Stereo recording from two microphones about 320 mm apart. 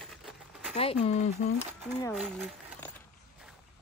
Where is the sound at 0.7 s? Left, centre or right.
Centre.